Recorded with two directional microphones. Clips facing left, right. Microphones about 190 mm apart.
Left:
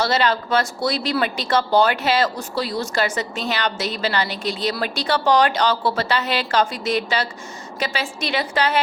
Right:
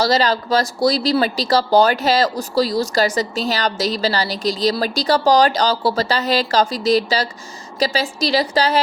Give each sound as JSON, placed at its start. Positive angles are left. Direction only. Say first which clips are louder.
{"t": 0.0, "sound": "speech", "louder": "right 3 dB", "side_deg": -35}